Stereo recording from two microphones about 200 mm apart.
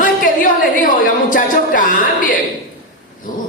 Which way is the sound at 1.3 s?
40° left (ahead or behind).